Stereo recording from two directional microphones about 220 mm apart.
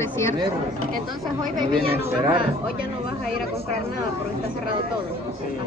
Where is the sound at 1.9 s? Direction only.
20° right (ahead or behind).